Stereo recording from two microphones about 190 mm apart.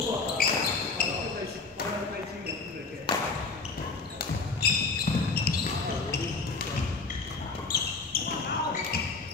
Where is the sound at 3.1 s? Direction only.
25° left (ahead or behind).